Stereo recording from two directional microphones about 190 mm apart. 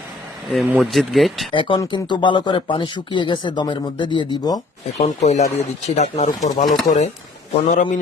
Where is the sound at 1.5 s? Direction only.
25° left (ahead or behind).